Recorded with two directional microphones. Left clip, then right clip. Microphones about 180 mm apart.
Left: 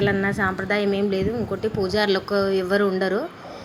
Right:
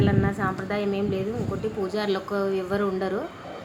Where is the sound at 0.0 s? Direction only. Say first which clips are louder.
Left 4 dB; 15° left (ahead or behind).